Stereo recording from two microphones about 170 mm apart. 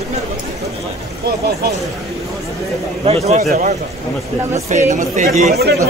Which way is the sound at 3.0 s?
40° right (ahead or behind).